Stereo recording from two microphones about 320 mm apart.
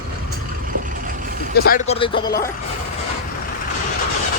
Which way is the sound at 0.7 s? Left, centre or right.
Right.